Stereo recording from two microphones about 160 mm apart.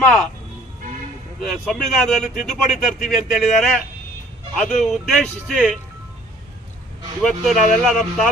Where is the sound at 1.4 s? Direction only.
Centre (ahead or behind).